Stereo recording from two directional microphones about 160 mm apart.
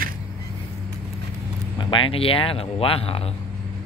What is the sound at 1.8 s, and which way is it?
Speech, 30° left (ahead or behind).